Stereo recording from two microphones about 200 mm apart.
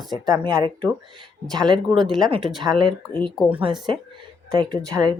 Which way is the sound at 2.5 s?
Centre (ahead or behind).